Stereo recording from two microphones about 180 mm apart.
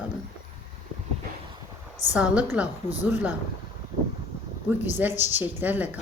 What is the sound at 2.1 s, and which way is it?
Speech, 5° right (ahead or behind).